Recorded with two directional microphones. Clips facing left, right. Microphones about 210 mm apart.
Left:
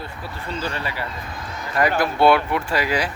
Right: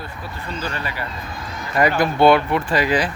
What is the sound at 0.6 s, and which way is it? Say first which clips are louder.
Speech: even; 30° left (ahead or behind).